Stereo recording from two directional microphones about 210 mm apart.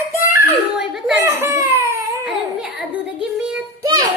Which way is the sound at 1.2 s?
15° right (ahead or behind).